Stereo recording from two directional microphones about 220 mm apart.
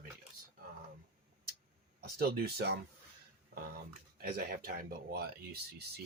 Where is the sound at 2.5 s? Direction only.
50° right (ahead or behind).